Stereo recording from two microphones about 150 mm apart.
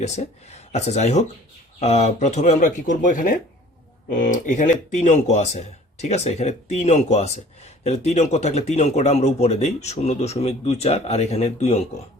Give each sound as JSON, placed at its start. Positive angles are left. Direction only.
{"t": 0.0, "sound": "speech", "side_deg": 50}